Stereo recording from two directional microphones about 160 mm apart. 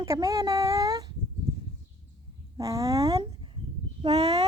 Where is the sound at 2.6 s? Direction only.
20° right (ahead or behind).